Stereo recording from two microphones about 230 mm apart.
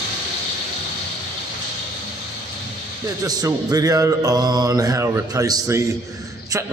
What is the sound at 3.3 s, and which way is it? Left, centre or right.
A man's voice, centre.